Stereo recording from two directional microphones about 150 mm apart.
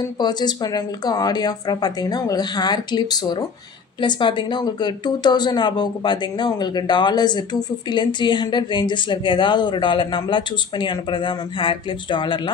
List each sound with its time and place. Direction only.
0.2 s speech: 30° left (ahead or behind)